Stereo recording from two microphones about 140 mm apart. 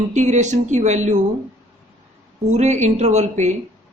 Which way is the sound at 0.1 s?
55° right (ahead or behind).